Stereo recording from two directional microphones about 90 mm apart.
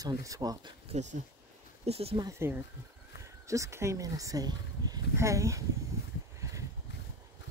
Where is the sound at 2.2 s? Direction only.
50° right (ahead or behind).